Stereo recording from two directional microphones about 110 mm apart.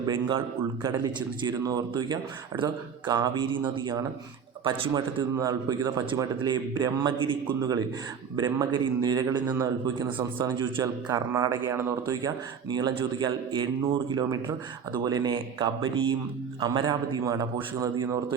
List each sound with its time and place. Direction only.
0.0 s a man's voice: 45° right (ahead or behind)
5.4 s a man's voice: 35° right (ahead or behind)
11.1 s speech: 30° right (ahead or behind)
12.9 s a man's voice: 50° right (ahead or behind); by 18.3 s 30° right (ahead or behind)